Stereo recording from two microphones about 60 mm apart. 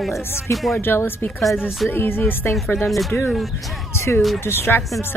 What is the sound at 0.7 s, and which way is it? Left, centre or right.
Speech, left.